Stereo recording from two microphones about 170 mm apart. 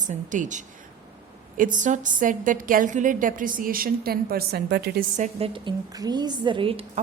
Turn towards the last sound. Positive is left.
turn(degrees=-30)  # may be behind; listen again after turning